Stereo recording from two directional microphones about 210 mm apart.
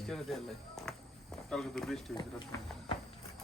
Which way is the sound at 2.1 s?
20° left (ahead or behind).